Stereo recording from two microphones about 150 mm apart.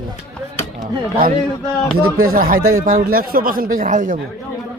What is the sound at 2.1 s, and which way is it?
Speech, 75° right (ahead or behind).